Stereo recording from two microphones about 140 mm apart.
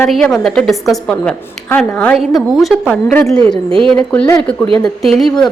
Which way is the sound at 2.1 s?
Centre (ahead or behind).